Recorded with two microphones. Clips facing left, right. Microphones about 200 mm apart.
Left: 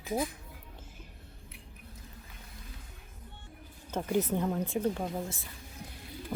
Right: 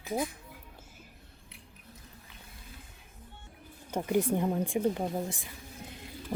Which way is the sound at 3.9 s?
10° right (ahead or behind).